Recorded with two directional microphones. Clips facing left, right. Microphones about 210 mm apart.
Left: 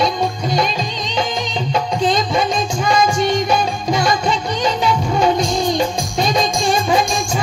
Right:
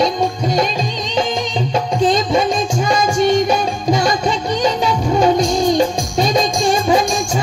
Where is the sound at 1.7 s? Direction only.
45° right (ahead or behind).